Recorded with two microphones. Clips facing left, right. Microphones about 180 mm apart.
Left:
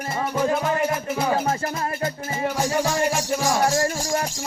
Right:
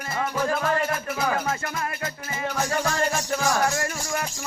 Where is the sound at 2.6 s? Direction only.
15° left (ahead or behind).